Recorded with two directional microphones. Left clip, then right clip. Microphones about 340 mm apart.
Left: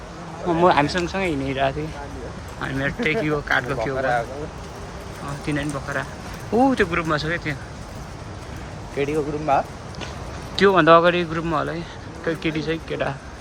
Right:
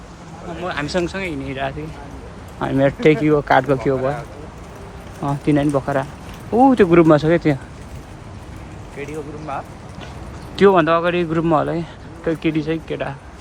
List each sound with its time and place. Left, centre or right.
0.6 s speech: centre
0.9 s speech: centre
2.6 s speech: centre
5.5 s speech: centre
9.0 s speech: left
10.5 s speech: centre